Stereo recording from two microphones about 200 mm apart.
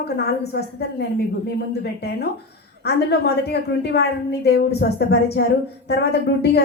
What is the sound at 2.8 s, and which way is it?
A woman's voice, 55° left (ahead or behind).